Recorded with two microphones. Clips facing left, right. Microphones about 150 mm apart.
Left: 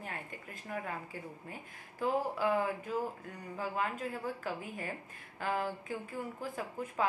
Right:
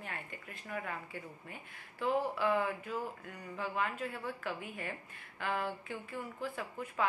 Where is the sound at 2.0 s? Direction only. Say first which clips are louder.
Even; 35° left (ahead or behind).